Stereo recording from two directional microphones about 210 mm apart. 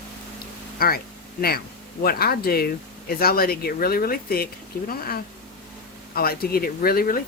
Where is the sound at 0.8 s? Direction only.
45° left (ahead or behind).